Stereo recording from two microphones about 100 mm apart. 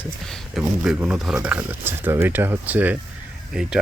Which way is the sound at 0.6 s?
5° right (ahead or behind).